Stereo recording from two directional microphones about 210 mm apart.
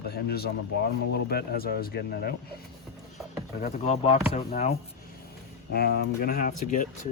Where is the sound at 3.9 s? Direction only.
30° left (ahead or behind).